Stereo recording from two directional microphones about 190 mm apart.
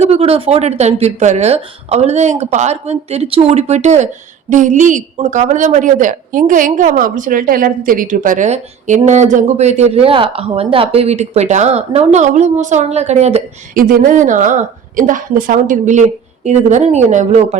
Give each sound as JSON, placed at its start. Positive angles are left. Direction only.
{"t": 0.0, "sound": "a woman's voice", "side_deg": -30}